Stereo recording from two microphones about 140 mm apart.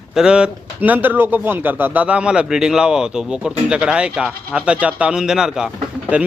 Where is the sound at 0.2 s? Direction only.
5° right (ahead or behind).